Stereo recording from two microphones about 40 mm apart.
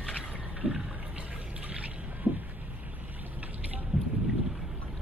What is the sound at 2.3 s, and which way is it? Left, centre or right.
Vehicle, right.